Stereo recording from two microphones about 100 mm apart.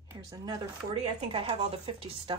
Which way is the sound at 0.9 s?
65° right (ahead or behind).